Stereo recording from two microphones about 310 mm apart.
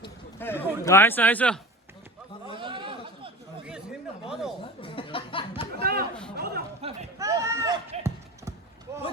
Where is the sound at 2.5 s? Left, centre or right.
Centre.